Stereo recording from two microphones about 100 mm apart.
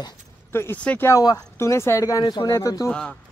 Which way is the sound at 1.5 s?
25° left (ahead or behind).